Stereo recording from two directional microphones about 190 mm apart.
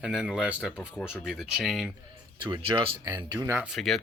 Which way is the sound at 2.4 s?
25° right (ahead or behind).